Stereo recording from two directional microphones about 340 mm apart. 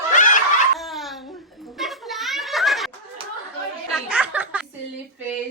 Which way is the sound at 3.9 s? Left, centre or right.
Centre.